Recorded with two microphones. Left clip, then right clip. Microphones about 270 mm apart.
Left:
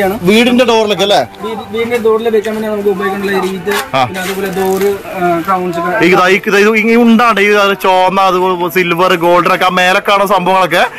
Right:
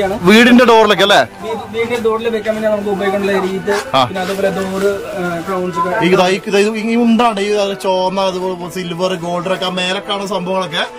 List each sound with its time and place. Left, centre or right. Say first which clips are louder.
0.3 s a man's voice: right 2 dB; centre
0.6 s a man's voice: right 1 dB; right
0.8 s a man's voice: right 1 dB; centre
5.9 s a man's voice: left 5 dB; centre
9.2 s speech: left 9 dB; left